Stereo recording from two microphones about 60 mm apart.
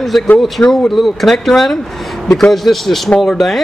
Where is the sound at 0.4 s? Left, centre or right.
Centre.